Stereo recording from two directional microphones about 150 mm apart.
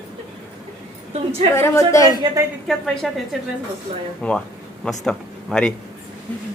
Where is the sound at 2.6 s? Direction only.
Centre (ahead or behind).